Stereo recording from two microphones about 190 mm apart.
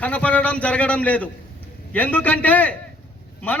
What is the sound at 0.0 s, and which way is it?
A man's voice, 5° left (ahead or behind).